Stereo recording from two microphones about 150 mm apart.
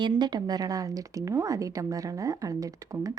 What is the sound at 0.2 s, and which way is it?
Speech, 30° right (ahead or behind).